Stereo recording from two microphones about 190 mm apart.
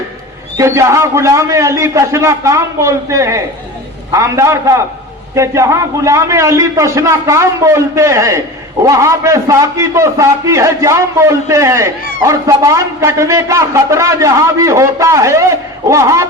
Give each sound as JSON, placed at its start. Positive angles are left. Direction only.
{"t": 0.5, "sound": "a man's voice", "side_deg": -15}